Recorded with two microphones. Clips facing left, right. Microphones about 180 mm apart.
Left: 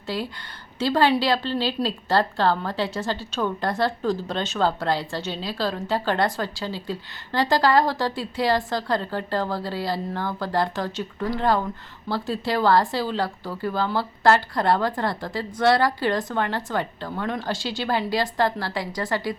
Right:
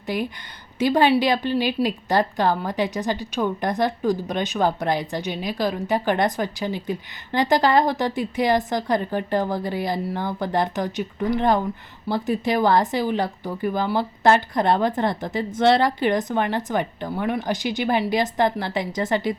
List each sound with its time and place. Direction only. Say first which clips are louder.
0.1 s a woman's voice: right 3 dB; 15° right (ahead or behind)